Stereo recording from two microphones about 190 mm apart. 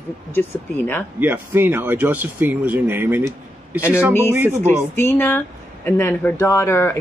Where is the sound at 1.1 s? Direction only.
10° right (ahead or behind).